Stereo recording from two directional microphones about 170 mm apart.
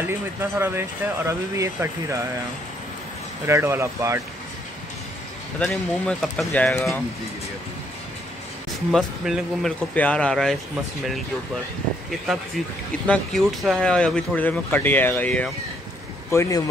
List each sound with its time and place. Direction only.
0.0 s speech: 15° right (ahead or behind)
3.4 s speech: 15° right (ahead or behind)
5.6 s speech: 5° left (ahead or behind)
8.9 s speech: centre (ahead or behind)
13.0 s a man's voice: 5° left (ahead or behind)